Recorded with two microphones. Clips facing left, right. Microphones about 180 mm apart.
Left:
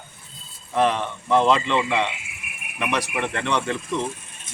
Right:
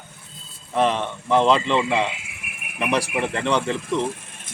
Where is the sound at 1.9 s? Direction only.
30° right (ahead or behind).